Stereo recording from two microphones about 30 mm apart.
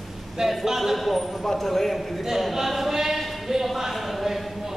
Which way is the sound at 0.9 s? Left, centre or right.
Centre.